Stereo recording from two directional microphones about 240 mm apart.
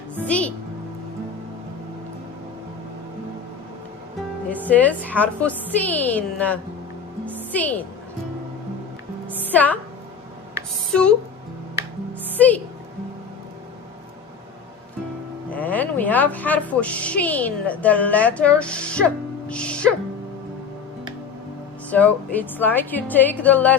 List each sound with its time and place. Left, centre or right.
0.3 s music: centre
4.7 s a woman's voice: centre
9.5 s a woman's voice: centre
12.4 s a woman's voice: centre
15.5 s speech: centre
21.8 s a woman's voice: centre